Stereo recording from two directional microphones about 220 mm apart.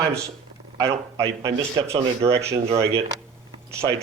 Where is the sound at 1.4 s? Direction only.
25° right (ahead or behind).